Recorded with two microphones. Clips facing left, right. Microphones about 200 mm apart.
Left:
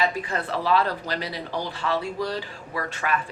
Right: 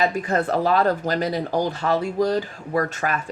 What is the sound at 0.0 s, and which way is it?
Speech, 45° right (ahead or behind).